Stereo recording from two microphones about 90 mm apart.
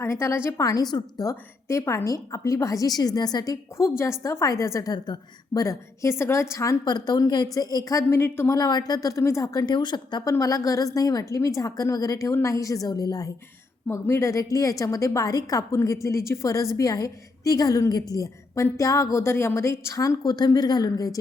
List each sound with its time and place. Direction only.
0.0 s a woman's voice: 30° left (ahead or behind); by 1.0 s 50° left (ahead or behind)
1.2 s a woman's voice: 35° left (ahead or behind)
4.9 s a woman's voice: 50° left (ahead or behind); by 6.7 s 35° left (ahead or behind)
6.8 s a woman's voice: 50° left (ahead or behind)
8.0 s speech: 25° left (ahead or behind)
8.5 s a woman's voice: 45° left (ahead or behind)
9.6 s speech: 55° left (ahead or behind)
10.2 s a woman's voice: 35° left (ahead or behind)
13.9 s a woman's voice: 30° left (ahead or behind)